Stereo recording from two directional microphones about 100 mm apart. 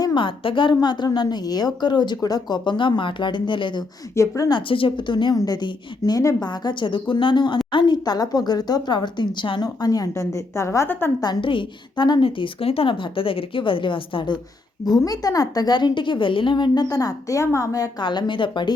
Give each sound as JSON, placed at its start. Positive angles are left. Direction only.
{"t": 0.0, "sound": "a woman's voice", "side_deg": 55}
{"t": 4.1, "sound": "a woman's voice", "side_deg": 30}
{"t": 4.4, "sound": "a woman's voice", "side_deg": 55}
{"t": 9.6, "sound": "speech", "side_deg": 35}
{"t": 11.3, "sound": "a woman's voice", "side_deg": 55}
{"t": 12.2, "sound": "a woman's voice", "side_deg": 65}
{"t": 14.8, "sound": "speech", "side_deg": 40}
{"t": 18.0, "sound": "a woman's voice", "side_deg": 50}